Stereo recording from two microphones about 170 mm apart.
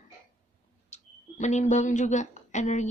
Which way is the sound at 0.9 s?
45° left (ahead or behind).